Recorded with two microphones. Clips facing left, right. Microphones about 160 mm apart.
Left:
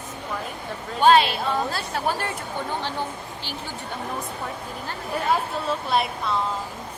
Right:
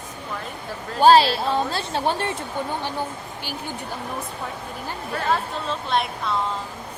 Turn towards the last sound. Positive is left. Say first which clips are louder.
# even
turn(degrees=5)  # may be behind; listen again after turning